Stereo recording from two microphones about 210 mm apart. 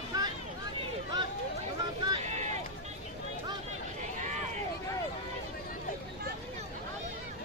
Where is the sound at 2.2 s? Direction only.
35° right (ahead or behind).